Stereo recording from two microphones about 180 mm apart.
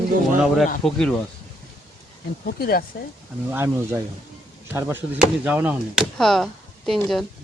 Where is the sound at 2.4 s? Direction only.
55° left (ahead or behind).